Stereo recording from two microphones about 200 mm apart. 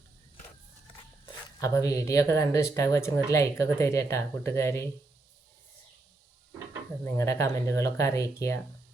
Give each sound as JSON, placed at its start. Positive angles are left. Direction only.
{"t": 1.5, "sound": "speech", "side_deg": 15}
{"t": 7.0, "sound": "speech", "side_deg": 15}